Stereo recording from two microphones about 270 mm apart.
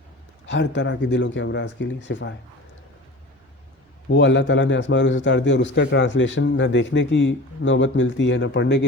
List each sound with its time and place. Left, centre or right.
0.4 s a man's voice: left
4.1 s a man's voice: left